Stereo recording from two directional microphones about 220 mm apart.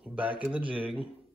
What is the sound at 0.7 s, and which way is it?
Speech, 25° right (ahead or behind).